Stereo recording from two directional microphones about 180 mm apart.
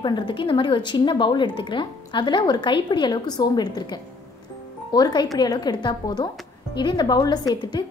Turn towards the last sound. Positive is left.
turn(degrees=20)  # may be behind; listen again after turning